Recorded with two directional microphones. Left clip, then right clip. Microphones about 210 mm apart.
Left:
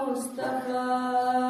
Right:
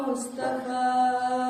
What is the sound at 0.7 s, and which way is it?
Mantra, 10° right (ahead or behind).